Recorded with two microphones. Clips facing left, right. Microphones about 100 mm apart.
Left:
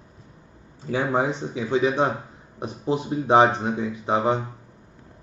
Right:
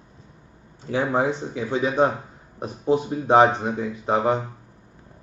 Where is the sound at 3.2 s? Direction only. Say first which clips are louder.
Even; 15° left (ahead or behind).